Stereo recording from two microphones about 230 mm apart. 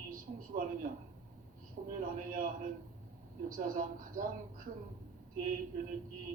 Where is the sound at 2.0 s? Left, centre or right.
Right.